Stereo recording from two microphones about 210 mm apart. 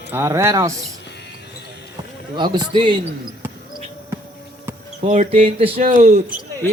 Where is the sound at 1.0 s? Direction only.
55° left (ahead or behind).